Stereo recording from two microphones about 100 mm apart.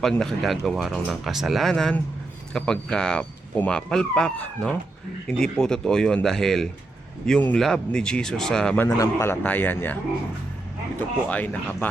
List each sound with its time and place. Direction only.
0.0 s speech: 5° left (ahead or behind)
8.9 s a man's voice: 30° left (ahead or behind)
11.3 s speech: 15° left (ahead or behind)